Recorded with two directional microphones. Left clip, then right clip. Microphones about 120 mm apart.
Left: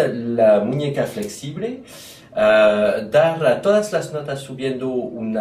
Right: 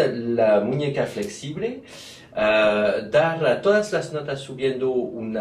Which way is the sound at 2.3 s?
Centre (ahead or behind).